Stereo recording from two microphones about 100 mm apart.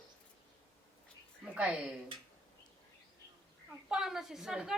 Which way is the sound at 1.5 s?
10° right (ahead or behind).